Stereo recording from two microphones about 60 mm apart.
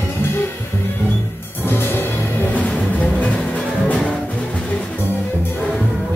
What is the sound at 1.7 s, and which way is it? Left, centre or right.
Music, left.